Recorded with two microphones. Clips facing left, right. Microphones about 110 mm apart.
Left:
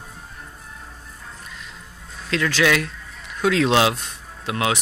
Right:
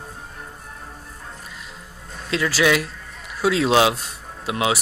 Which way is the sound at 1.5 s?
5° right (ahead or behind).